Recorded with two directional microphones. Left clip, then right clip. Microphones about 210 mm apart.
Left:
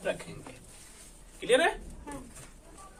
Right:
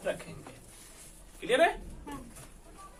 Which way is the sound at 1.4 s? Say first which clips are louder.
Even; 25° left (ahead or behind).